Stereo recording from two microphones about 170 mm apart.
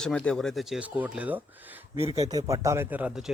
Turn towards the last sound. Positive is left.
turn(degrees=-10)  # may be behind; listen again after turning